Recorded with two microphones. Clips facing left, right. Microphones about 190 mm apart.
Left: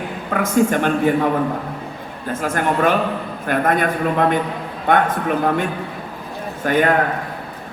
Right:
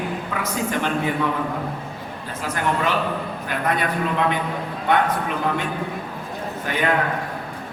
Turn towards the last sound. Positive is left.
turn(degrees=45)  # may be behind; listen again after turning